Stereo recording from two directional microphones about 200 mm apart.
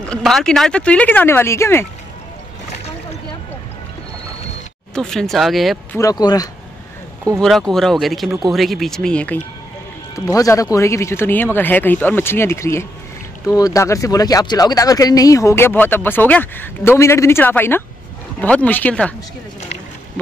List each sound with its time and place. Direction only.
0.1 s speech: centre (ahead or behind)
4.9 s speech: centre (ahead or behind)
5.9 s speech: 20° left (ahead or behind)
7.3 s speech: centre (ahead or behind)
10.1 s speech: 15° left (ahead or behind)